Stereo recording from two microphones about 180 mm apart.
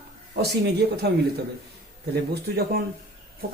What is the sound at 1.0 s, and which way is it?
Speech, 65° right (ahead or behind).